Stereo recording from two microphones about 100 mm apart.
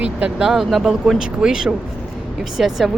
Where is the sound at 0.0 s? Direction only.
10° right (ahead or behind).